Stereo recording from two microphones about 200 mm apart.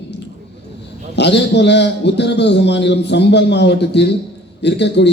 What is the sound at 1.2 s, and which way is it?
A man's voice, 60° left (ahead or behind).